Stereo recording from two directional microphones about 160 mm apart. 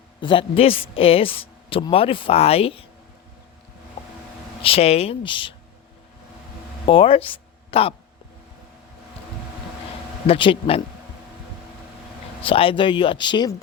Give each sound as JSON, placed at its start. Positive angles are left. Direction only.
{"t": 0.2, "sound": "a man's voice", "side_deg": 30}
{"t": 4.6, "sound": "a man's voice", "side_deg": 40}
{"t": 6.8, "sound": "speech", "side_deg": 35}
{"t": 10.2, "sound": "a man's voice", "side_deg": 35}
{"t": 12.4, "sound": "a man's voice", "side_deg": 35}